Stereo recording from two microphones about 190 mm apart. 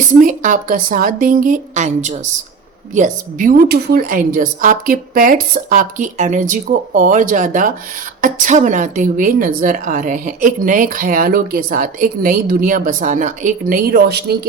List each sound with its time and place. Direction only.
0.2 s a woman's voice: 45° right (ahead or behind)